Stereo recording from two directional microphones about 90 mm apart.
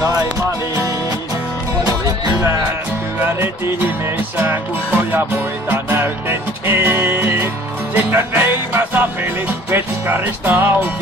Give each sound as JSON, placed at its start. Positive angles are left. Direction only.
{"t": 4.4, "sound": "music", "side_deg": -20}